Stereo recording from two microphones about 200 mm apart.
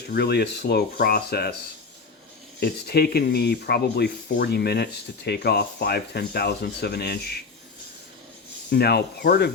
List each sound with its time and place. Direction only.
0.1 s speech: 55° left (ahead or behind)
2.6 s speech: 50° left (ahead or behind)
8.7 s speech: 55° left (ahead or behind)